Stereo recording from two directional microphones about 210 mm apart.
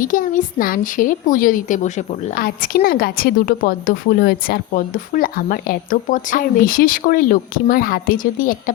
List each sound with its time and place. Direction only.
0.0 s a woman's voice: 40° left (ahead or behind)